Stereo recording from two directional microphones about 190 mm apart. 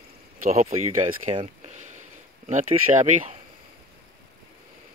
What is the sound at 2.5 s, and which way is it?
Speech, 40° right (ahead or behind).